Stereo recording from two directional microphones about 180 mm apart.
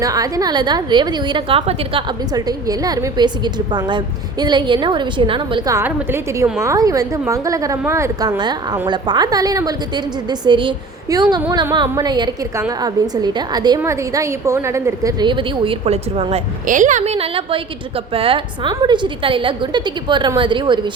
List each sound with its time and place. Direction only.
0.0 s a woman's voice: 20° right (ahead or behind)
5.7 s a woman's voice: 15° right (ahead or behind); by 16.4 s 35° right (ahead or behind)
16.6 s a woman's voice: 45° right (ahead or behind); by 20.9 s 25° right (ahead or behind)